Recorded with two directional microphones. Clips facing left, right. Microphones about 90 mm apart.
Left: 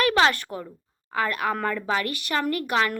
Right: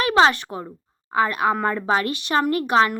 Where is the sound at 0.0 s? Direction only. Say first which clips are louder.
Right 3 dB; 20° right (ahead or behind).